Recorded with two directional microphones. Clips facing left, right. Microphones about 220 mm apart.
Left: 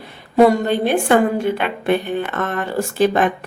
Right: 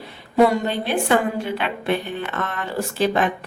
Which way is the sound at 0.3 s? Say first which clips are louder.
Left 4 dB; 50° left (ahead or behind).